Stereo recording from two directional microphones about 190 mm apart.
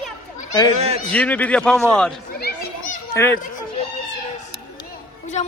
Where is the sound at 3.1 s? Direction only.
15° left (ahead or behind).